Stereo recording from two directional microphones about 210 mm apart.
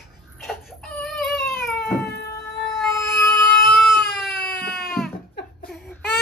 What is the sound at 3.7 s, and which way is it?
Baby cry, centre (ahead or behind).